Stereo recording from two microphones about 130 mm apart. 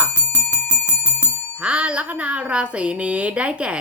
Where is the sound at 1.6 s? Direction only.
10° right (ahead or behind).